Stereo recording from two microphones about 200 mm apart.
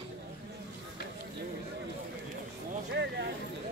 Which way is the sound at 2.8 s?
60° right (ahead or behind).